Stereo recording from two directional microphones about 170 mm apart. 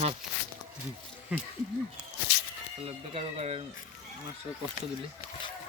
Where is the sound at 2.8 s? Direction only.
35° right (ahead or behind).